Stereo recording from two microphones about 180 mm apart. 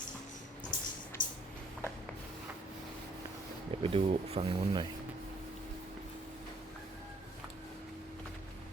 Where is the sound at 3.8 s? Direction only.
30° right (ahead or behind).